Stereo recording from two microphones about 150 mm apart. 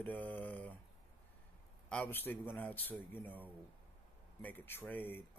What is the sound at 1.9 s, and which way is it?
Speech, 10° left (ahead or behind).